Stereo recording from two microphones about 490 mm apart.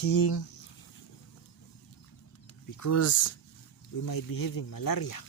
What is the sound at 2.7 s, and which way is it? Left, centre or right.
Speech, left.